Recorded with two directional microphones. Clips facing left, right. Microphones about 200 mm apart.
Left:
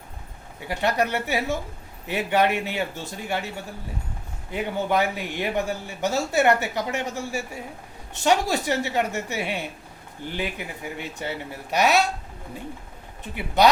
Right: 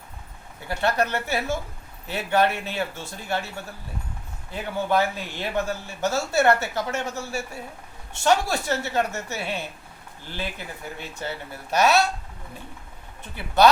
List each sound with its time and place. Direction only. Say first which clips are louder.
0.7 s speech: even; 15° left (ahead or behind)
4.5 s speech: even; 15° left (ahead or behind)
13.6 s speech: right 1 dB; 15° left (ahead or behind)